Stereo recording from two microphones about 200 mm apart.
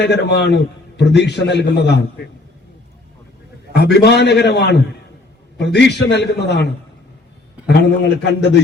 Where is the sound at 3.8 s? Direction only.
60° left (ahead or behind).